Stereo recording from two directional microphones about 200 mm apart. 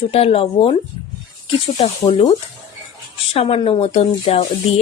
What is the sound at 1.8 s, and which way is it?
Speech, 30° left (ahead or behind).